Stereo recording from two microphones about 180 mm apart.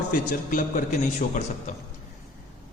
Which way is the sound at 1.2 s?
40° left (ahead or behind).